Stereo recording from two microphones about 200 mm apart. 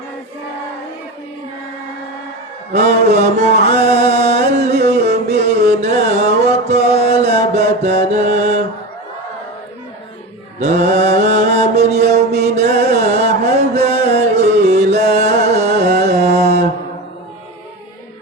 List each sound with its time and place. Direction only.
2.7 s a sound: 35° right (ahead or behind)
3.7 s music: 35° right (ahead or behind)
10.6 s mantra: 35° right (ahead or behind)
16.0 s music: 35° right (ahead or behind)